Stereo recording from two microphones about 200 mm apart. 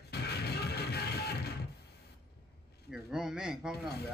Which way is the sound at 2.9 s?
5° right (ahead or behind).